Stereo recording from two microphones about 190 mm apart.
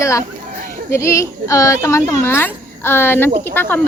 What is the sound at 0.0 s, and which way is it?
A woman's voice, 15° left (ahead or behind).